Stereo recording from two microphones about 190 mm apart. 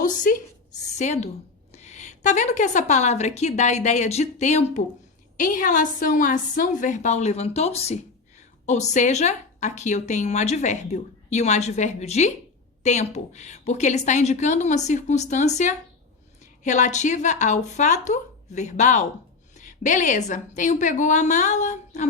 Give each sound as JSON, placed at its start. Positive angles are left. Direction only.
{"t": 0.0, "sound": "a woman's voice", "side_deg": 45}